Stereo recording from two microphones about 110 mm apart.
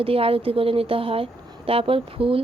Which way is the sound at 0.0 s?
60° right (ahead or behind).